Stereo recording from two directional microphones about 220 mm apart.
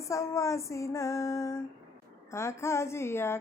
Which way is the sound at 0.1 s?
15° left (ahead or behind).